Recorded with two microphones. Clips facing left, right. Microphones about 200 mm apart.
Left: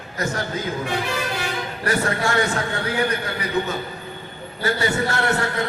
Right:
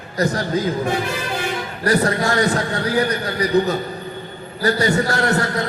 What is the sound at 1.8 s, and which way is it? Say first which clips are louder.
A man's voice: right 5 dB; 40° right (ahead or behind).